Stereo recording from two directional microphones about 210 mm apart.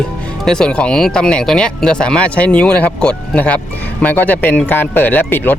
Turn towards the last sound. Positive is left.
turn(degrees=10)  # may be behind; listen again after turning